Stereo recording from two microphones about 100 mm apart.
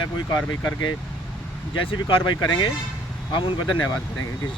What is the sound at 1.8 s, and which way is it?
Speech, 55° left (ahead or behind).